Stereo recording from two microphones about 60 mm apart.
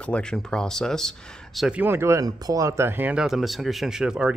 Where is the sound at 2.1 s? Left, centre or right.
Right.